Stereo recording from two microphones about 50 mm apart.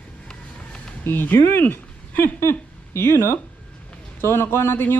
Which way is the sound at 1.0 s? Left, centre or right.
Left.